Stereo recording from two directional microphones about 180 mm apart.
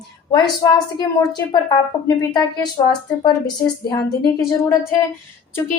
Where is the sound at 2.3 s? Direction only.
20° left (ahead or behind).